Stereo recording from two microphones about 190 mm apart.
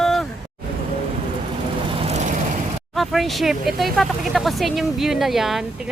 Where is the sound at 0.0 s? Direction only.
Centre (ahead or behind).